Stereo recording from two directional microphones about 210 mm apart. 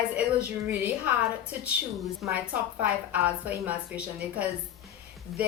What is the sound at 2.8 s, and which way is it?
A woman's voice, 5° right (ahead or behind).